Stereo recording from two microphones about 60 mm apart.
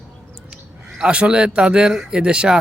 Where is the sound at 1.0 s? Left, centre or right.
Centre.